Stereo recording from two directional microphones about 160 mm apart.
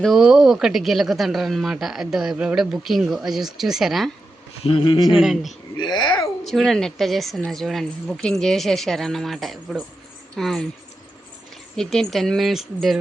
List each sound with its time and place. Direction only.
0.0 s speech: centre (ahead or behind)
4.6 s speech: 35° left (ahead or behind)
5.0 s speech: centre (ahead or behind)
5.8 s speech: 30° left (ahead or behind)
6.4 s speech: centre (ahead or behind)
11.8 s speech: centre (ahead or behind)